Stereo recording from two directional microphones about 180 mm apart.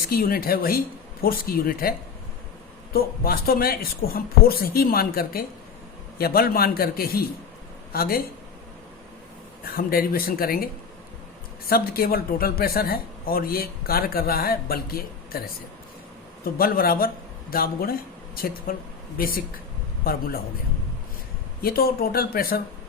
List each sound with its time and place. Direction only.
0.1 s speech: 55° left (ahead or behind)
9.7 s speech: 55° left (ahead or behind)
11.7 s speech: 55° left (ahead or behind)
16.4 s speech: 55° left (ahead or behind)
21.6 s speech: 55° left (ahead or behind)